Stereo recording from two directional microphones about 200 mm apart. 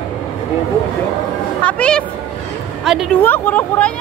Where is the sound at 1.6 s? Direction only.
5° left (ahead or behind).